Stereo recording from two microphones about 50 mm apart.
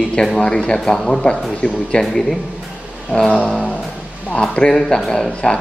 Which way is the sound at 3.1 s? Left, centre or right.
Centre.